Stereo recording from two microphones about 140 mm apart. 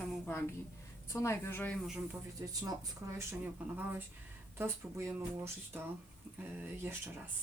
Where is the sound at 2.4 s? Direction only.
20° right (ahead or behind).